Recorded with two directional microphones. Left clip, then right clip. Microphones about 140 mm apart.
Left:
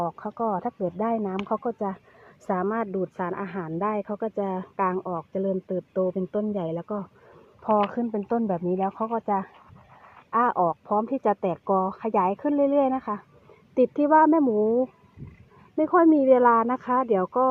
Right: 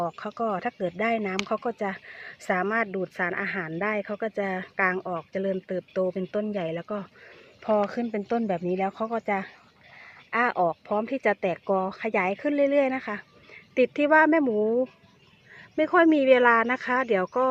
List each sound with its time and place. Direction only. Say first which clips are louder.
0.0 s speech: left 1 dB; 30° right (ahead or behind)
8.1 s speech: left 1 dB; 25° right (ahead or behind)